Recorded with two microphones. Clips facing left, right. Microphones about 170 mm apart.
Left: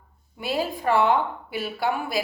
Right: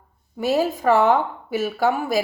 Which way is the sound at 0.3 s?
45° right (ahead or behind).